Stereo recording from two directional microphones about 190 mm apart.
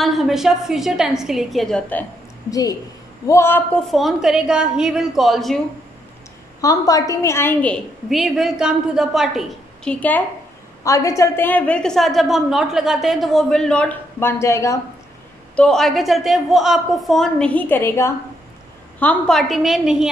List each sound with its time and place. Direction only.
0.0 s a woman's voice: centre (ahead or behind)
2.5 s a woman's voice: 20° left (ahead or behind)
3.9 s a woman's voice: centre (ahead or behind)
6.6 s a woman's voice: 20° left (ahead or behind)
15.5 s a woman's voice: 5° left (ahead or behind)